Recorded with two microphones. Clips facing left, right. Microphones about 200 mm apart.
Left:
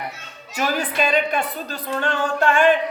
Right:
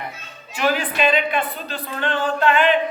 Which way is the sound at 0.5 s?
40° left (ahead or behind).